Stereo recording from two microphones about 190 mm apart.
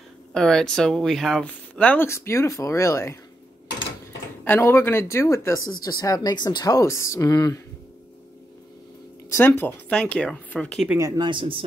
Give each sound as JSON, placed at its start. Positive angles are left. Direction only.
{"t": 0.3, "sound": "speech", "side_deg": 5}
{"t": 4.5, "sound": "speech", "side_deg": 10}
{"t": 9.3, "sound": "speech", "side_deg": 10}
{"t": 10.9, "sound": "speech", "side_deg": -15}